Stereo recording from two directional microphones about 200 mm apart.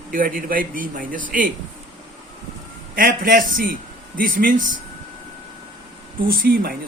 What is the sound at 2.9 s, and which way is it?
Speech, 45° right (ahead or behind).